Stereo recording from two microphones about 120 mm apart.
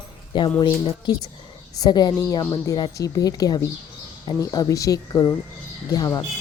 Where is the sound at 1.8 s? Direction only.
35° left (ahead or behind).